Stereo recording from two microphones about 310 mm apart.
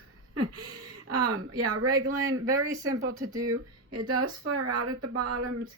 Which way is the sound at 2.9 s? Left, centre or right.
Right.